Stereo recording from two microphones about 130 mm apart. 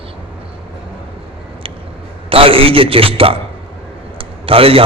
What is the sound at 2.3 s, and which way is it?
A man's voice, 45° right (ahead or behind).